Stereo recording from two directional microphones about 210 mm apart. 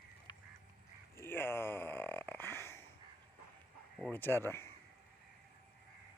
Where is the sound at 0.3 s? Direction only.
20° left (ahead or behind).